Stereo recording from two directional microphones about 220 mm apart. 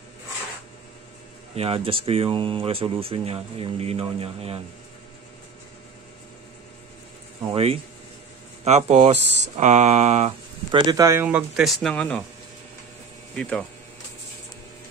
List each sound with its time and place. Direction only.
1.5 s speech: 25° right (ahead or behind)
7.5 s speech: 25° right (ahead or behind); by 12.2 s 5° left (ahead or behind)
13.4 s speech: 5° left (ahead or behind)